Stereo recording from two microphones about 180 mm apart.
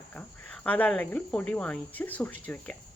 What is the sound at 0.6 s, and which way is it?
Speech, 5° left (ahead or behind).